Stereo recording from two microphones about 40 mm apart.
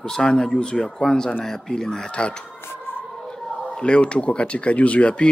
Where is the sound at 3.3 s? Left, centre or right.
Left.